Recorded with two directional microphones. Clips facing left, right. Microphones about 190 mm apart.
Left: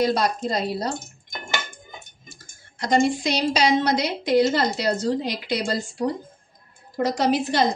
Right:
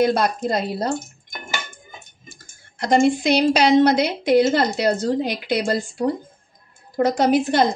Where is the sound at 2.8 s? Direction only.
60° right (ahead or behind).